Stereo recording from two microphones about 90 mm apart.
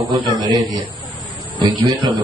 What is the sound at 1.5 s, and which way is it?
Speech, 50° right (ahead or behind).